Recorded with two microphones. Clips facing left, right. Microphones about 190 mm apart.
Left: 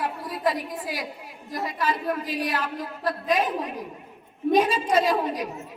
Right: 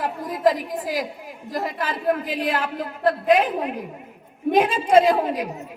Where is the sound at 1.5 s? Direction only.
50° right (ahead or behind).